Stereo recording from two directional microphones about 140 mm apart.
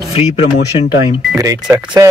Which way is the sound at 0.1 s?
45° left (ahead or behind).